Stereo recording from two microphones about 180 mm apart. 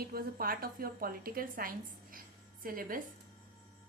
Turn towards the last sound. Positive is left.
turn(degrees=-50)  # may be behind; listen again after turning